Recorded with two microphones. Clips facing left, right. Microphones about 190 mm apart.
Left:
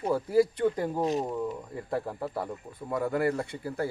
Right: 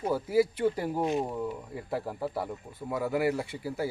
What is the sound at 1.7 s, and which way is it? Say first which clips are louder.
Speech: left 2 dB; 5° right (ahead or behind).